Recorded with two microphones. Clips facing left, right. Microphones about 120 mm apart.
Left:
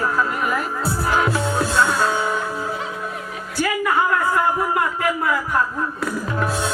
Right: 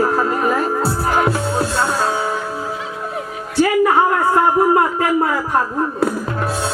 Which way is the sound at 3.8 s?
35° right (ahead or behind).